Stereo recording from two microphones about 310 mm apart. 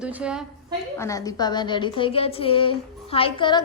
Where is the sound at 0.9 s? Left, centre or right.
Centre.